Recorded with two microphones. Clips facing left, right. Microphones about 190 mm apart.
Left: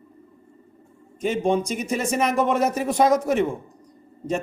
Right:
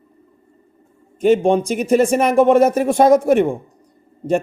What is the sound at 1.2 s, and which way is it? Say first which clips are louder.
Mantra: right 8 dB; 60° right (ahead or behind).